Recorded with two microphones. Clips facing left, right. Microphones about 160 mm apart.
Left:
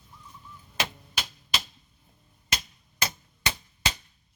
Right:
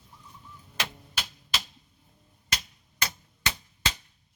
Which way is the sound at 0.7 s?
10° left (ahead or behind).